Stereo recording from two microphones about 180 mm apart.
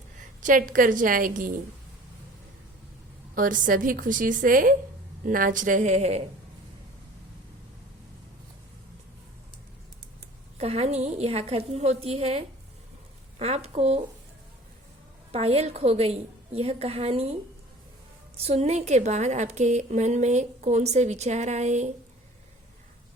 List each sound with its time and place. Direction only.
0.2 s a woman's voice: 45° right (ahead or behind)
3.3 s a woman's voice: 50° right (ahead or behind)
10.6 s a woman's voice: 35° right (ahead or behind)
15.3 s a woman's voice: 35° right (ahead or behind)
18.3 s a woman's voice: 35° right (ahead or behind)